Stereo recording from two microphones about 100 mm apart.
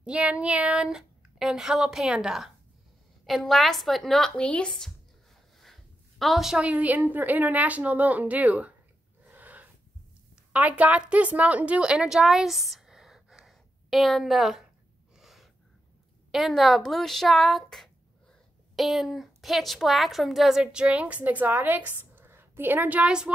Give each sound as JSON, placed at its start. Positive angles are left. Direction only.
{"t": 0.0, "sound": "speech", "side_deg": -10}
{"t": 5.6, "sound": "a sound", "side_deg": 0}
{"t": 7.1, "sound": "a woman's voice", "side_deg": -15}
{"t": 9.3, "sound": "wheeze", "side_deg": -15}
{"t": 10.5, "sound": "a woman's voice", "side_deg": -15}
{"t": 15.1, "sound": "gasp", "side_deg": 0}
{"t": 16.3, "sound": "a woman's voice", "side_deg": 0}